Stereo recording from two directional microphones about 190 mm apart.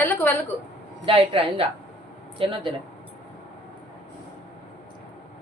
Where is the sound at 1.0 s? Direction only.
30° right (ahead or behind).